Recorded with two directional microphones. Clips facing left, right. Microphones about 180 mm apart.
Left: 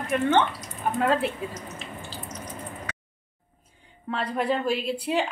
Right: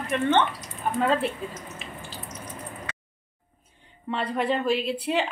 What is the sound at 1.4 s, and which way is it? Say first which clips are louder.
Speech: left 1 dB; 10° left (ahead or behind).